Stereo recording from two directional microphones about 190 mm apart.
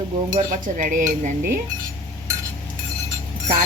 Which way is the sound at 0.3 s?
45° right (ahead or behind).